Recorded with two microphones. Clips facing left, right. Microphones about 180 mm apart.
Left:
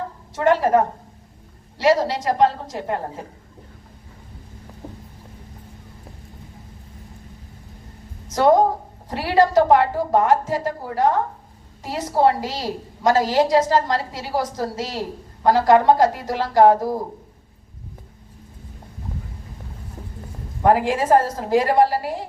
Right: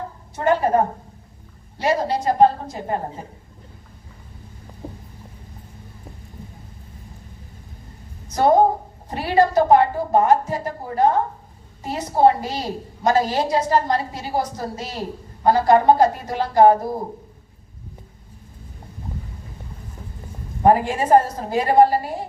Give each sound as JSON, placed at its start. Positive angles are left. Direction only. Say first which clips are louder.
{"t": 0.3, "sound": "a woman's voice", "louder": "left 2 dB", "side_deg": 90}
{"t": 1.8, "sound": "a woman's voice", "louder": "left 3 dB", "side_deg": 90}
{"t": 4.8, "sound": "boat", "louder": "right 2 dB", "side_deg": -15}
{"t": 8.3, "sound": "a woman's voice", "louder": "even", "side_deg": 90}
{"t": 20.7, "sound": "a woman's voice", "louder": "right 1 dB", "side_deg": 90}